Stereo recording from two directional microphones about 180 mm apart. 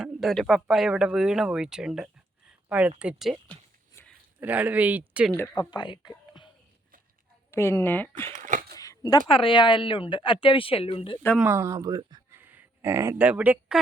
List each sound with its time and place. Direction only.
0.0 s speech: centre (ahead or behind)
3.9 s a sound: 5° left (ahead or behind)
4.4 s speech: 10° right (ahead or behind)
5.5 s speech: 25° left (ahead or behind)
7.5 s speech: 15° left (ahead or behind)
8.3 s speech: 45° right (ahead or behind)
8.7 s speech: 20° left (ahead or behind)
11.3 s speech: 10° right (ahead or behind)